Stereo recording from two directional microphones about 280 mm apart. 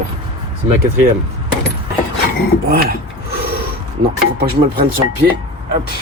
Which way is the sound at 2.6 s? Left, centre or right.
Right.